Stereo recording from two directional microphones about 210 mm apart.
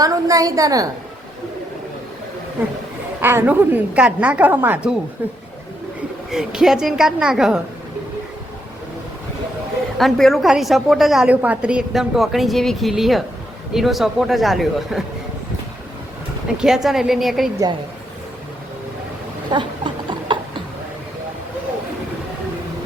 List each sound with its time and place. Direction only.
0.0 s a woman's voice: 15° right (ahead or behind)
3.2 s a woman's voice: 10° right (ahead or behind)
6.3 s a woman's voice: centre (ahead or behind)
10.0 s a woman's voice: centre (ahead or behind)
16.6 s a woman's voice: centre (ahead or behind)
19.5 s a sound: 20° right (ahead or behind)